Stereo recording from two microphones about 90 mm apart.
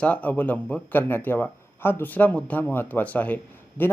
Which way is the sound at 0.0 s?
15° left (ahead or behind).